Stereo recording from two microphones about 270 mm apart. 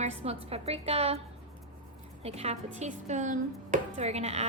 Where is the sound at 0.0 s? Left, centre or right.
Right.